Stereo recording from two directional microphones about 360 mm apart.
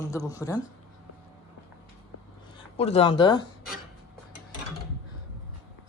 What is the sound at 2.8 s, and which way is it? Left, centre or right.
Speech, centre.